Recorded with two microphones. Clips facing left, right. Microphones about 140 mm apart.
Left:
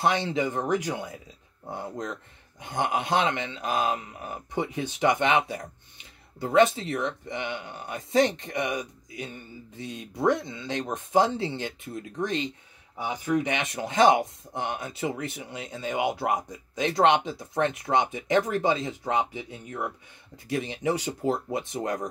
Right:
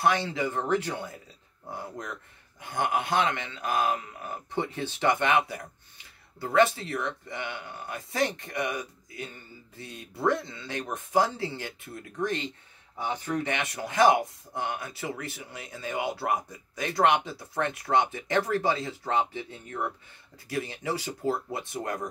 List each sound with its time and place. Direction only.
0.0 s speech: 20° left (ahead or behind)